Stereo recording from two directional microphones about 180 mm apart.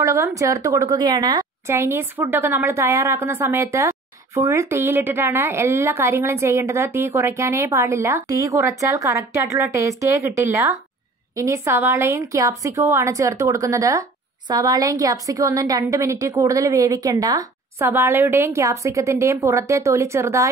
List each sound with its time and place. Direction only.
0.0 s a woman's voice: 15° right (ahead or behind)